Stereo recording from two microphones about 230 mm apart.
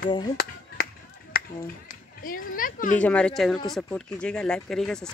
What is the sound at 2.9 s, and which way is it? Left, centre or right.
Speech, centre.